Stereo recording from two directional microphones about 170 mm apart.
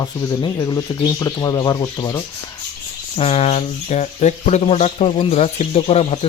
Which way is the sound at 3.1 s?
35° left (ahead or behind).